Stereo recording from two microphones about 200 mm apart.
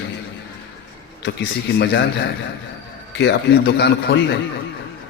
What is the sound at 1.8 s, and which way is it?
A man's voice, 60° left (ahead or behind).